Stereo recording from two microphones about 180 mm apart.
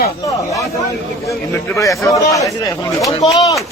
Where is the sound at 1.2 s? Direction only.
15° left (ahead or behind).